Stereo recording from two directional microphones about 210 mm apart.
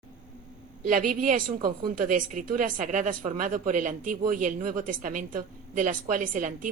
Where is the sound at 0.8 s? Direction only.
40° right (ahead or behind).